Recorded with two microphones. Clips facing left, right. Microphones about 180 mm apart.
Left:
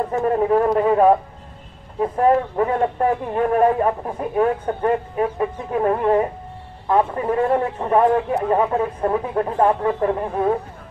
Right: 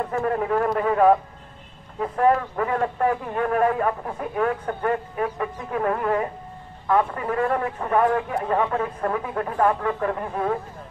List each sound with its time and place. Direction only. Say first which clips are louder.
0.2 s speech: left 6 dB; 25° left (ahead or behind)